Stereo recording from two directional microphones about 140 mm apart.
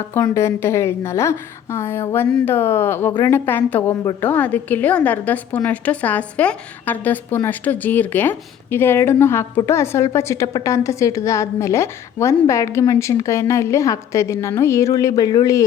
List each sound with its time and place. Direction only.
0.1 s a woman's voice: 15° left (ahead or behind)